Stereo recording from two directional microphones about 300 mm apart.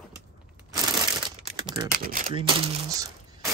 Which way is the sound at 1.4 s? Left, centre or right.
Centre.